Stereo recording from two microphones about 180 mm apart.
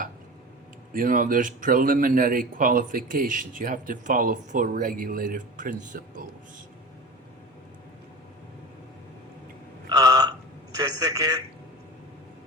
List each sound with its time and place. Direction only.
0.9 s speech: 50° right (ahead or behind)
9.9 s a sound: 20° right (ahead or behind)
10.8 s a man's voice: 20° right (ahead or behind)